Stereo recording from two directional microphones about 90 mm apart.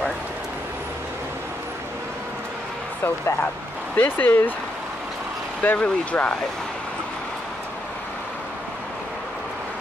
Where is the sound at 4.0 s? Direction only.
20° left (ahead or behind).